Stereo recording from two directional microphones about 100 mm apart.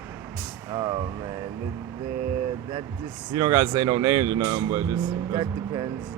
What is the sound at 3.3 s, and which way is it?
Speech, 40° right (ahead or behind).